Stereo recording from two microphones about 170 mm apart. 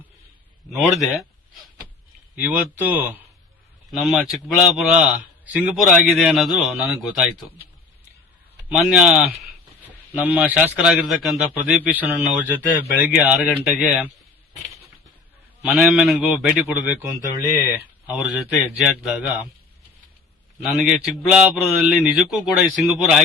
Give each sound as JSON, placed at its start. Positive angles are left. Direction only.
{"t": 0.7, "sound": "a man's voice", "side_deg": 0}
{"t": 2.3, "sound": "a man's voice", "side_deg": -10}
{"t": 8.7, "sound": "a man's voice", "side_deg": -5}
{"t": 15.6, "sound": "a man's voice", "side_deg": -5}
{"t": 18.1, "sound": "a man's voice", "side_deg": -5}
{"t": 20.6, "sound": "a man's voice", "side_deg": -5}